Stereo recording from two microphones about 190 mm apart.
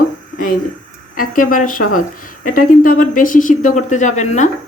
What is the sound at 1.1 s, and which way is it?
Speech, 45° left (ahead or behind).